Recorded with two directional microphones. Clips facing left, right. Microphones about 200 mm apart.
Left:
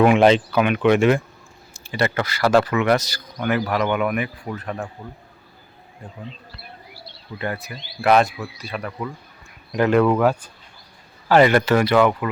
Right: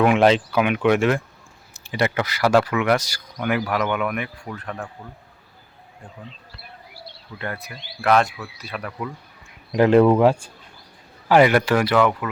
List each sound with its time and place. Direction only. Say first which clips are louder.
0.0 s speech: left 2 dB; centre (ahead or behind)
1.7 s speech: even; 15° right (ahead or behind); by 4.9 s 10° left (ahead or behind)
7.3 s speech: left 4 dB; 5° left (ahead or behind)
9.7 s speech: right 3 dB; 25° right (ahead or behind)
11.3 s speech: left 1 dB; 10° right (ahead or behind)